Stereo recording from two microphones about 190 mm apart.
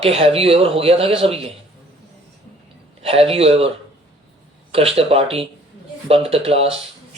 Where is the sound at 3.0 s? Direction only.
30° right (ahead or behind).